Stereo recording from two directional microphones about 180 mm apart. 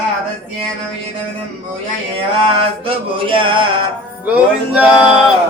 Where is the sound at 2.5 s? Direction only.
30° right (ahead or behind).